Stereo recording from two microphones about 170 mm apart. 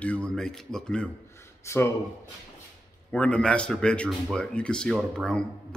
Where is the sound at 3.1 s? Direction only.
10° left (ahead or behind).